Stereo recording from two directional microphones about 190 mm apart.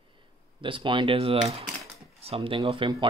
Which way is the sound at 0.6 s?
25° right (ahead or behind).